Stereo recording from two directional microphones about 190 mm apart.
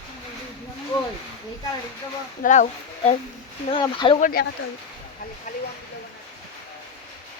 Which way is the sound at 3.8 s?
25° left (ahead or behind).